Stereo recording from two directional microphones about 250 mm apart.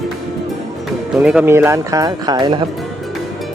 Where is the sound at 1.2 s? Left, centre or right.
Centre.